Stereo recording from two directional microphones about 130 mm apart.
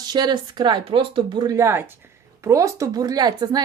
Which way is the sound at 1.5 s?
20° right (ahead or behind).